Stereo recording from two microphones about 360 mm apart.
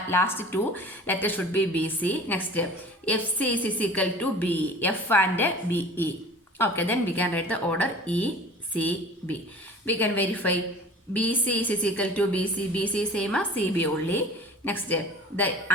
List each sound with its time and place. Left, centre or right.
0.1 s a woman's voice: centre